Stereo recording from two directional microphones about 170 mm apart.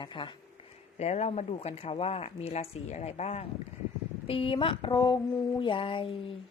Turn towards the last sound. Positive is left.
turn(degrees=30)  # may be behind; listen again after turning